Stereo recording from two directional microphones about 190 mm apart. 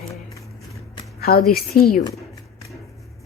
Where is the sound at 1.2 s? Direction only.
55° left (ahead or behind).